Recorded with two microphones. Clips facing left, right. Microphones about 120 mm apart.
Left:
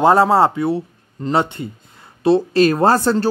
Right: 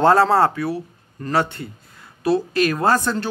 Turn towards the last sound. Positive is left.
turn(degrees=35)  # may be behind; listen again after turning